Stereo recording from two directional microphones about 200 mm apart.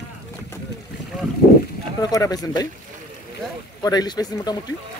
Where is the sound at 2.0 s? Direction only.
15° left (ahead or behind).